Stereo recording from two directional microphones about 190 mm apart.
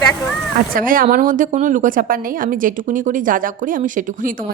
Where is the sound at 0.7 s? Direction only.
45° right (ahead or behind).